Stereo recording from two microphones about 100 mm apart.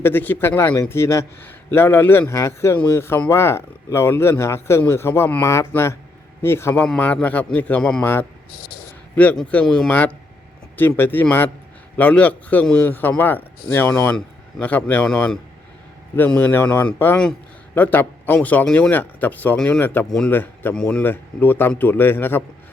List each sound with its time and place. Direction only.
0.0 s speech: 20° left (ahead or behind)
6.8 s a man's voice: 15° left (ahead or behind)
8.0 s a man's voice: 20° left (ahead or behind); by 9.9 s 5° left (ahead or behind)
9.9 s a man's voice: 15° left (ahead or behind)
16.1 s a man's voice: 20° left (ahead or behind)
19.5 s a man's voice: 5° left (ahead or behind)
19.8 s a man's voice: 20° left (ahead or behind)
20.7 s a man's voice: 10° left (ahead or behind)
21.0 s speech: 20° left (ahead or behind)